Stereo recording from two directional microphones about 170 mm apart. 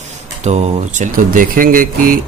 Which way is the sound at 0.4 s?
40° right (ahead or behind).